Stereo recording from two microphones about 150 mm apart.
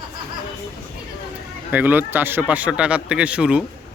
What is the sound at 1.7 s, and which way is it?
Speech, 10° right (ahead or behind).